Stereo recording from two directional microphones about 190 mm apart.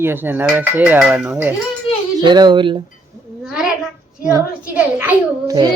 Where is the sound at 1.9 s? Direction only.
30° left (ahead or behind).